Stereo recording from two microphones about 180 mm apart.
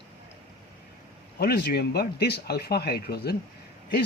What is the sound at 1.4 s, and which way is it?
Speech, 65° left (ahead or behind).